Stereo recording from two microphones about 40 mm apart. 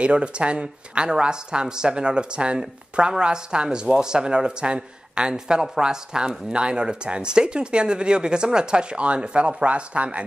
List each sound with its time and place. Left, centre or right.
0.0 s speech: right